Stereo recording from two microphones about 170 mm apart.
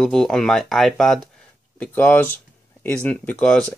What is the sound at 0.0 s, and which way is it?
Speech, centre (ahead or behind).